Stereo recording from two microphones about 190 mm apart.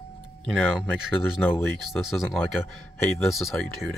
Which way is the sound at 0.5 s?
Centre (ahead or behind).